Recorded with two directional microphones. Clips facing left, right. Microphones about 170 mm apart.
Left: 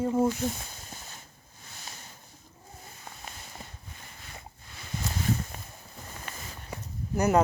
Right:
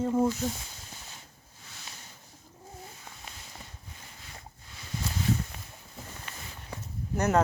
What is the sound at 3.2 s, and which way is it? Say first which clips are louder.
Walk: left 3 dB; 50° left (ahead or behind).